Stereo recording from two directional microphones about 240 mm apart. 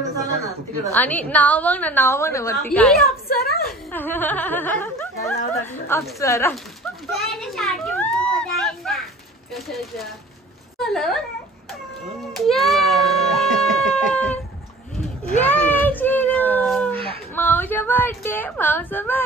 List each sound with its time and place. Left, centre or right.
0.9 s a woman's voice: centre
3.3 s a woman's voice: left
3.9 s a woman's voice: centre
7.1 s a child's voice: centre
12.4 s baby cry: centre
15.2 s a sound: centre
17.4 s speech: centre